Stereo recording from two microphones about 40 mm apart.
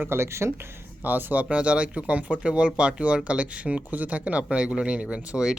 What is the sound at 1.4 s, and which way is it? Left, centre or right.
Speech, right.